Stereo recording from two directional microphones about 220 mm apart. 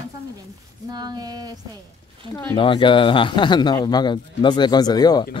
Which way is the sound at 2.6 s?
20° left (ahead or behind).